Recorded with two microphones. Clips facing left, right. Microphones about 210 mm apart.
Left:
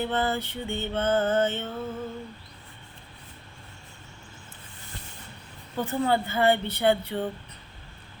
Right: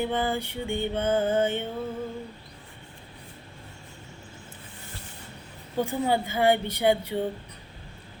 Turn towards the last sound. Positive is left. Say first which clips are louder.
# even
turn(degrees=-10)  # may be behind; listen again after turning